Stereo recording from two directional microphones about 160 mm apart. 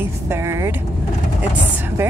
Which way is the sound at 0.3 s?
15° right (ahead or behind).